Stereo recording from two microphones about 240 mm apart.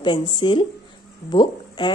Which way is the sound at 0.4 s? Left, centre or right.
Centre.